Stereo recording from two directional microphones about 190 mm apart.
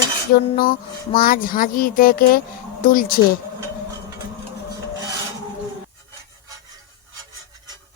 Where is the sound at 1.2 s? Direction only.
45° left (ahead or behind).